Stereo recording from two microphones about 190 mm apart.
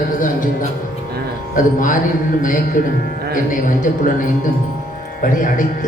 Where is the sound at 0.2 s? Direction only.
45° left (ahead or behind).